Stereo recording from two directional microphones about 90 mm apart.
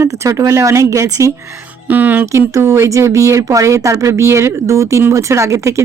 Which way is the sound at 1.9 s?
20° right (ahead or behind).